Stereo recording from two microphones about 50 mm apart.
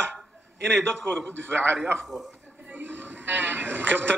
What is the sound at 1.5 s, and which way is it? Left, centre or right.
A man's voice, right.